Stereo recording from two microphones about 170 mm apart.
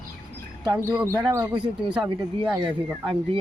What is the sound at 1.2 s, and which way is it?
Speech, 25° right (ahead or behind).